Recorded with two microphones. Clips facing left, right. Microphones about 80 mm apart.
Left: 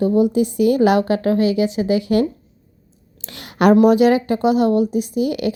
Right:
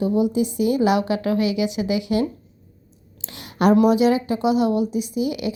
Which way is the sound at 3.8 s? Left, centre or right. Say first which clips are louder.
Left 4 dB; left.